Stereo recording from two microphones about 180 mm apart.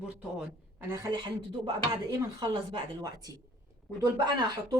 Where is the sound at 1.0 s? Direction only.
25° right (ahead or behind).